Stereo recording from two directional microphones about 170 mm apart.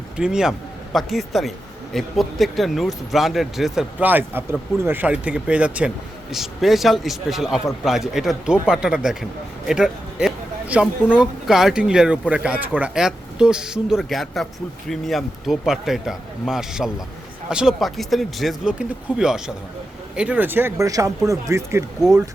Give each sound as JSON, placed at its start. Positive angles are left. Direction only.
{"t": 0.2, "sound": "speech", "side_deg": -5}